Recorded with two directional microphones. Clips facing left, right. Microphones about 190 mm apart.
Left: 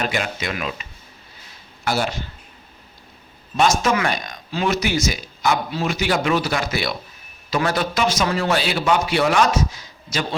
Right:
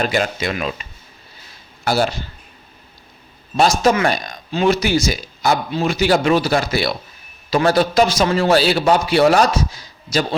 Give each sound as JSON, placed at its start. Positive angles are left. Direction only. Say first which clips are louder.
{"t": 0.0, "sound": "speech", "louder": "right 5 dB", "side_deg": -35}
{"t": 1.8, "sound": "speech", "louder": "right 4 dB", "side_deg": -35}
{"t": 3.6, "sound": "speech", "louder": "right 4 dB", "side_deg": -35}